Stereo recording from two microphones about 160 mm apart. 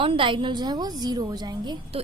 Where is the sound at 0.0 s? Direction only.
35° right (ahead or behind).